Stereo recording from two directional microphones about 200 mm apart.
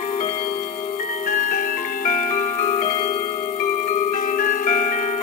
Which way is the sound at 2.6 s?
15° left (ahead or behind).